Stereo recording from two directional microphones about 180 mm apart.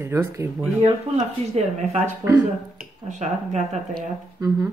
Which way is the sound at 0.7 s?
35° right (ahead or behind).